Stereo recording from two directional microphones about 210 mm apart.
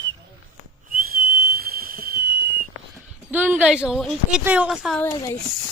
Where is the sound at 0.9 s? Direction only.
45° right (ahead or behind).